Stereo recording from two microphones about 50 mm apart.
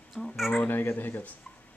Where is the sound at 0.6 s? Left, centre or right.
Left.